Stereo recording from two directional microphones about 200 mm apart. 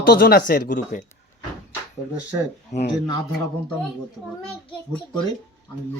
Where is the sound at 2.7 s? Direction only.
35° left (ahead or behind).